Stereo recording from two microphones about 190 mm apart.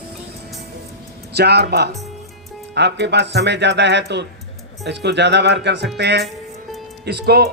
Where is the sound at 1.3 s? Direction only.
60° right (ahead or behind).